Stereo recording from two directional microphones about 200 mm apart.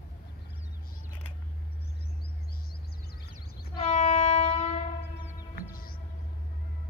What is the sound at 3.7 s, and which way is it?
Train, 30° left (ahead or behind).